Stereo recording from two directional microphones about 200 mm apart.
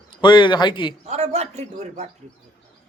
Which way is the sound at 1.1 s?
35° right (ahead or behind).